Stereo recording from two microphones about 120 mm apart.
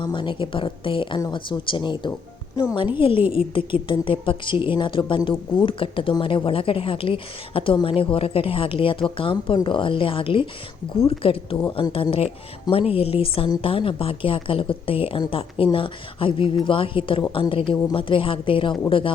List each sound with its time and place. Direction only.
0.0 s speech: 40° left (ahead or behind)